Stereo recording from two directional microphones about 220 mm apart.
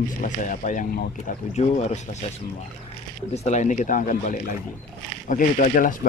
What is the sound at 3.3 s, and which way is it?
Speech, 30° left (ahead or behind).